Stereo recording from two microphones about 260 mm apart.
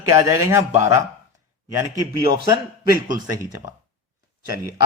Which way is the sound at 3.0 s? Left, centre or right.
Centre.